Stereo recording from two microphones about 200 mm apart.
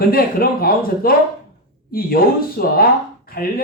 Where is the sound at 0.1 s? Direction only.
50° left (ahead or behind).